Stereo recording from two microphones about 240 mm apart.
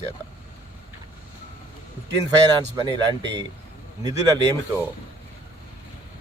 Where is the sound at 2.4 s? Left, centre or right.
Centre.